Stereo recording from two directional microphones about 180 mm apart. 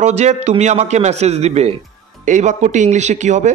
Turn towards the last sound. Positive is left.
turn(degrees=-40)  # may be behind; listen again after turning